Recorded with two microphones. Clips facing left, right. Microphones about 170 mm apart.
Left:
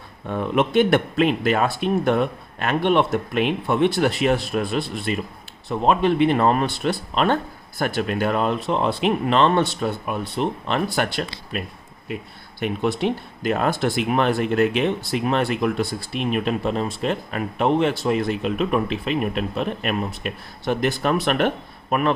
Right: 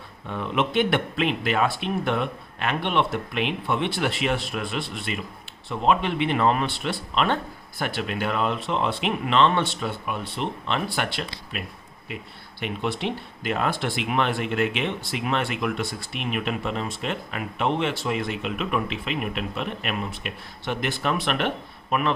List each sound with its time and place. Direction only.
0.3 s speech: 45° left (ahead or behind)